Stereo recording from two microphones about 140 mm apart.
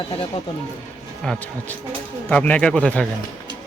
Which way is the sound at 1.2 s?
5° left (ahead or behind).